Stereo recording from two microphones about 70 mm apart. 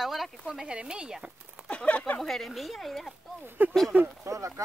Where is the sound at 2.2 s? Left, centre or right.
Centre.